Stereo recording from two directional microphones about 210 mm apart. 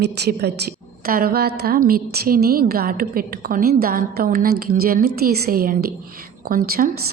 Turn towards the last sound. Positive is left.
turn(degrees=-45)  # may be behind; listen again after turning